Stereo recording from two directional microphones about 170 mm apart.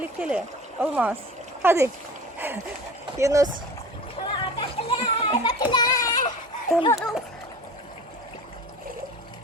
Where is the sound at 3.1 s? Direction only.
20° right (ahead or behind).